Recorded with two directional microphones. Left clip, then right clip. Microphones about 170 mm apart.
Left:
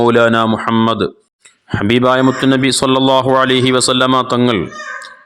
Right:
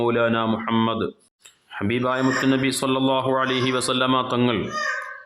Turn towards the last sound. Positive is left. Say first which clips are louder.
# left 8 dB
turn(degrees=40)  # may be behind; listen again after turning